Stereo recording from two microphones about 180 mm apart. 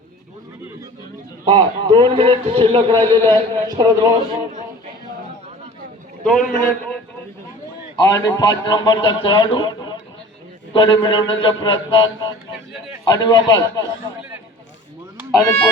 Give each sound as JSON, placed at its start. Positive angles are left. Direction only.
{"t": 1.5, "sound": "a man's voice", "side_deg": -25}
{"t": 6.2, "sound": "a man's voice", "side_deg": 5}
{"t": 7.9, "sound": "a man's voice", "side_deg": 20}
{"t": 15.3, "sound": "speech", "side_deg": 15}